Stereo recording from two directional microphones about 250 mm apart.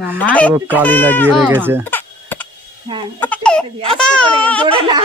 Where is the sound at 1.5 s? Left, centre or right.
Centre.